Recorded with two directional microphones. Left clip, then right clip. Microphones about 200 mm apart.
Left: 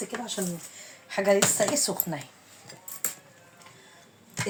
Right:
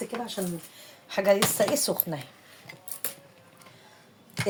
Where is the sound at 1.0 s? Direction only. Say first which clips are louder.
Even; 50° right (ahead or behind).